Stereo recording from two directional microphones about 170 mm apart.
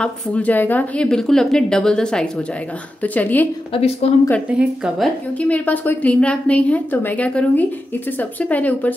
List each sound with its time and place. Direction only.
0.0 s a woman's voice: 10° left (ahead or behind)
3.7 s speech: 35° left (ahead or behind)
4.5 s a woman's voice: 5° right (ahead or behind)